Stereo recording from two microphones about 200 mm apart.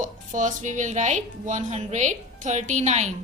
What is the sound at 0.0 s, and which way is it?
A woman's voice, 40° right (ahead or behind).